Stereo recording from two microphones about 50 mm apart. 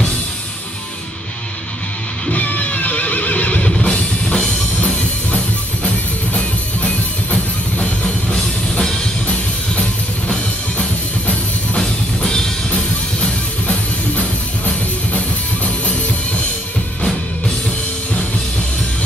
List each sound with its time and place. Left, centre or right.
2.3 s music: left
3.6 s music: left
8.0 s music: centre